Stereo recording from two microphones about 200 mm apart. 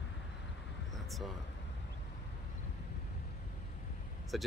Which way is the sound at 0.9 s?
Centre (ahead or behind).